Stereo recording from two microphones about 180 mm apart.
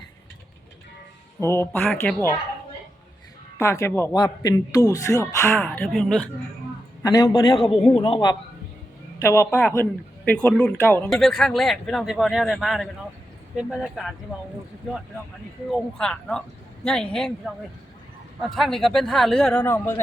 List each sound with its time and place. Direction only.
1.4 s a man's voice: 15° left (ahead or behind)
3.6 s a man's voice: 15° left (ahead or behind)
5.5 s speech: 5° left (ahead or behind)
7.0 s speech: 20° left (ahead or behind)
7.7 s speech: 30° left (ahead or behind)
9.2 s a man's voice: 15° left (ahead or behind); by 14.1 s centre (ahead or behind)
15.7 s speech: 5° left (ahead or behind)